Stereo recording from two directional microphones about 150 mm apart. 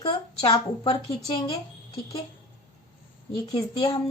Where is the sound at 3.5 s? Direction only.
25° left (ahead or behind).